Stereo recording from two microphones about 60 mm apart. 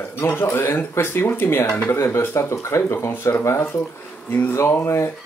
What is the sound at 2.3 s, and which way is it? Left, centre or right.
Speech, left.